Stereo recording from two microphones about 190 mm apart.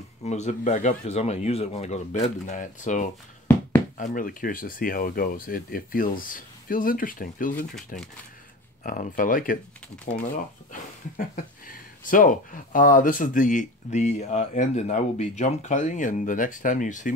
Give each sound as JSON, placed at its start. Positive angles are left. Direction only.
{"t": 0.2, "sound": "speech", "side_deg": 35}
{"t": 10.7, "sound": "speech", "side_deg": 45}